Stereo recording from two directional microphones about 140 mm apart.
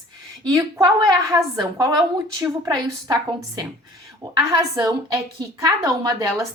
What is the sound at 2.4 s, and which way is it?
A woman's voice, 25° right (ahead or behind).